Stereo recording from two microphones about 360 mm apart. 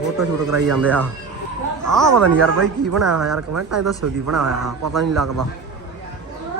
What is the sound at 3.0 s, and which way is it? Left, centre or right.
Speech, centre.